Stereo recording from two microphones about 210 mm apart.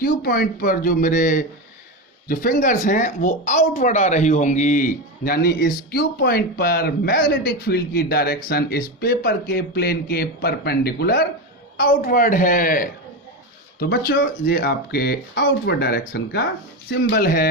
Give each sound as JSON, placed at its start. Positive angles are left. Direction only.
{"t": 0.0, "sound": "a woman's voice", "side_deg": 45}